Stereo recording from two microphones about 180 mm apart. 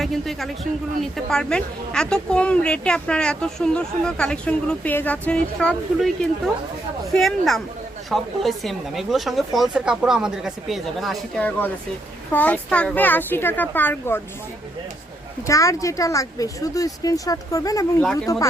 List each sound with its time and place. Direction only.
0.0 s a man's voice: centre (ahead or behind)
15.4 s speech: 15° left (ahead or behind)
18.0 s a woman's voice: 5° left (ahead or behind)